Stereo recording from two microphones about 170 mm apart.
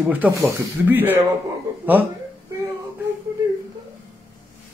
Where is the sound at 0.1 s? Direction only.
10° right (ahead or behind).